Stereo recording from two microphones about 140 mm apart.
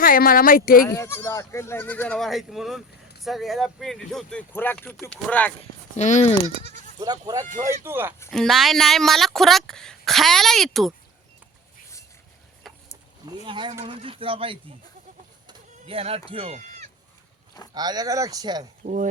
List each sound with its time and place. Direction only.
0.0 s speech: 90° left
0.9 s speech: 20° left (ahead or behind)
5.5 s speech: 55° left (ahead or behind)
7.0 s speech: 30° right (ahead or behind)
7.6 s speech: 20° right (ahead or behind)
8.3 s speech: centre (ahead or behind)
12.7 s a sound: centre (ahead or behind)
13.2 s speech: 35° right (ahead or behind)
16.6 s sheep: 55° right (ahead or behind)
17.7 s speech: 30° right (ahead or behind)